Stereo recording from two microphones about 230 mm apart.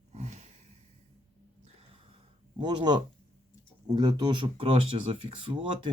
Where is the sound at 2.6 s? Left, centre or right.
Centre.